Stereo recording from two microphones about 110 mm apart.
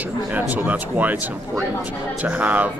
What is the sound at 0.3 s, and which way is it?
Speech, 15° right (ahead or behind).